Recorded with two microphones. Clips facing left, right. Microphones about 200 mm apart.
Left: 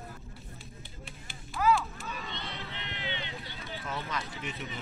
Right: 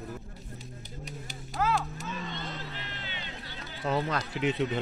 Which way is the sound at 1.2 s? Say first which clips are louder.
Left 3 dB; 40° right (ahead or behind).